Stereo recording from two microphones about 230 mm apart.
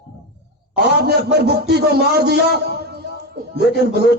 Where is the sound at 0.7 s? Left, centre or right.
Right.